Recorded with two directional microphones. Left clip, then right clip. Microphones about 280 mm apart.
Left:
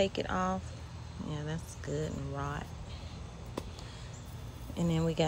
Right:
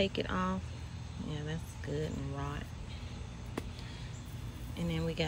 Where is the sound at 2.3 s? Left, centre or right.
Centre.